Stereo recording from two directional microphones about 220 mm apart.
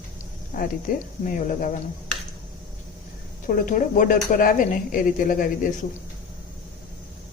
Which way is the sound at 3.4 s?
40° left (ahead or behind).